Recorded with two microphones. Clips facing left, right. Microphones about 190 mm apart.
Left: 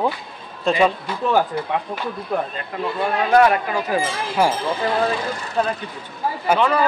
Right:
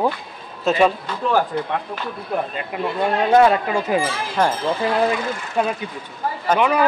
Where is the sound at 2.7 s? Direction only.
15° right (ahead or behind).